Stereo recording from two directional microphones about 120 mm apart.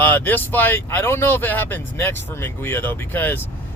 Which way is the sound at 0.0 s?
15° left (ahead or behind).